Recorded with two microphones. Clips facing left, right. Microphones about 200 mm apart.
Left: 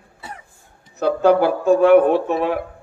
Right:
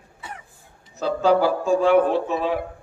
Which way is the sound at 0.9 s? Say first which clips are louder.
Left 4 dB; 60° left (ahead or behind).